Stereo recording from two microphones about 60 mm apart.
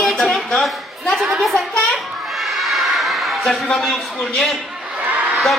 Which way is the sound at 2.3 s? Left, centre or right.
Centre.